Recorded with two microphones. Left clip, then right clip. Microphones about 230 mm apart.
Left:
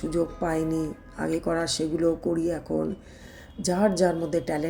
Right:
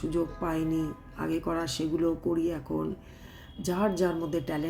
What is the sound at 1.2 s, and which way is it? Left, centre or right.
Speech, centre.